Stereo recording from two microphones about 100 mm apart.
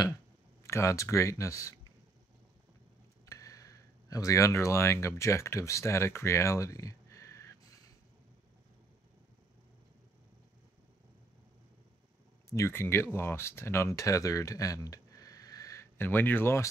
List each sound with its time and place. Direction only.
0.7 s speech: 30° left (ahead or behind)
3.3 s speech: 35° left (ahead or behind)
12.4 s speech: 30° left (ahead or behind)
16.0 s speech: 20° left (ahead or behind)